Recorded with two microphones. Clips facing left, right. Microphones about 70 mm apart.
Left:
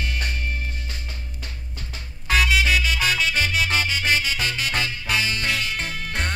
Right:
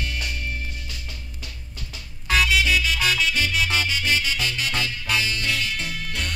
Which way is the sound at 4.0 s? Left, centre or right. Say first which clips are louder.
Left 1 dB; left.